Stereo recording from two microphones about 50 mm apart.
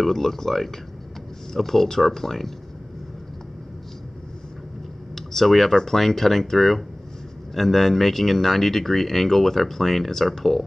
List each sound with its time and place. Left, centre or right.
0.0 s speech: centre
5.1 s speech: centre